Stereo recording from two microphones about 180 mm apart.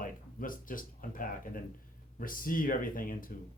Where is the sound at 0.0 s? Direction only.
50° left (ahead or behind).